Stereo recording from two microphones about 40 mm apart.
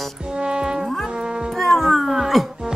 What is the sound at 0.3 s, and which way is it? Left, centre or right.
Music, right.